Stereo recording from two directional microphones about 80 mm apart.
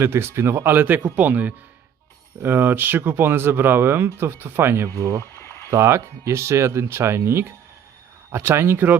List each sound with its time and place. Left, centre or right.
0.0 s speech: right
5.2 s a sound: left
5.7 s speech: right